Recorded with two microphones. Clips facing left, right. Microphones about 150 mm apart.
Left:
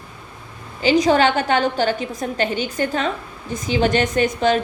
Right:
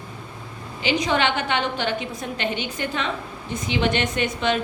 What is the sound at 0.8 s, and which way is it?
A woman's voice, 40° left (ahead or behind).